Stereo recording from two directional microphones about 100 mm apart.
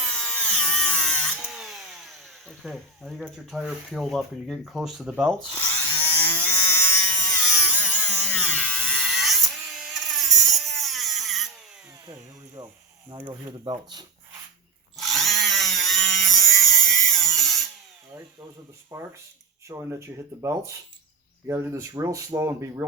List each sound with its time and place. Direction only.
0.0 s tools: 15° left (ahead or behind)
1.5 s tools: centre (ahead or behind)
2.5 s speech: centre (ahead or behind)
5.9 s chainsaw: 20° left (ahead or behind)
7.5 s a sound: 15° left (ahead or behind)
9.0 s a sound: centre (ahead or behind)
12.6 s a sound: 45° right (ahead or behind)
13.1 s speech: 55° right (ahead or behind)
14.9 s tools: centre (ahead or behind)
18.9 s speech: 25° right (ahead or behind)